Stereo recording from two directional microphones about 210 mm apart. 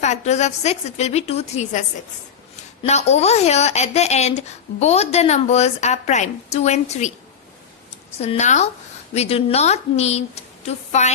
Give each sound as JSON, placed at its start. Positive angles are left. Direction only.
{"t": 0.0, "sound": "a woman's voice", "side_deg": 35}
{"t": 2.8, "sound": "a woman's voice", "side_deg": 30}
{"t": 8.2, "sound": "a woman's voice", "side_deg": 30}